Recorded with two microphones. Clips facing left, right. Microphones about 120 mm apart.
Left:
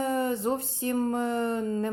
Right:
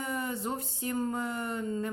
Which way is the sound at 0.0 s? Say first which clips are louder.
Left 7 dB; 30° left (ahead or behind).